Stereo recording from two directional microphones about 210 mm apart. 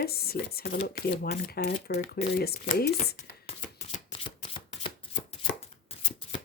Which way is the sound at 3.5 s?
30° left (ahead or behind).